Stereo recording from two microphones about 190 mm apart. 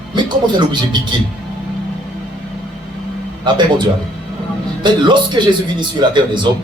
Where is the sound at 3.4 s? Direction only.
25° right (ahead or behind).